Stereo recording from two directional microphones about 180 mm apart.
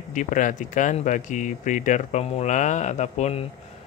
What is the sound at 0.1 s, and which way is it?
Speech, 45° left (ahead or behind).